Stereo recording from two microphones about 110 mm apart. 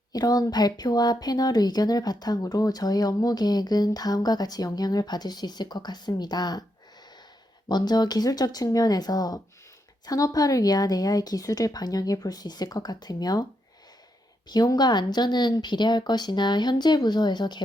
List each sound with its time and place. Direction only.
0.1 s speech: 35° left (ahead or behind)
7.7 s speech: 40° left (ahead or behind)
14.5 s speech: 40° left (ahead or behind)